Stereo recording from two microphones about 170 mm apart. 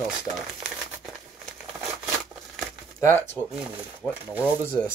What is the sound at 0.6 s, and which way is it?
Crumpling, centre (ahead or behind).